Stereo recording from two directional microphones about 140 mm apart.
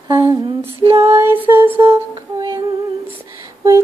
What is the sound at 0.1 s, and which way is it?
Female singing, 30° right (ahead or behind).